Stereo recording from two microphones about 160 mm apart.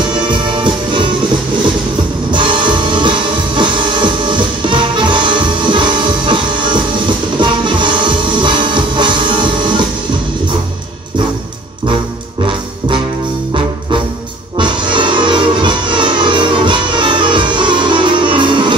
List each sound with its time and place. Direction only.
0.1 s music: 30° right (ahead or behind)
2.3 s music: 30° right (ahead or behind)
12.4 s music: 30° right (ahead or behind)
14.6 s music: 30° right (ahead or behind)